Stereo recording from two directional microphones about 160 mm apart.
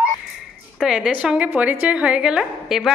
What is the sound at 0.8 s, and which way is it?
Speech, 5° right (ahead or behind).